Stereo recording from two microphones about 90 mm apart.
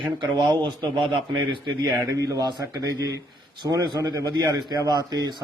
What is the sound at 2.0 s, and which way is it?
A man's voice, 40° right (ahead or behind).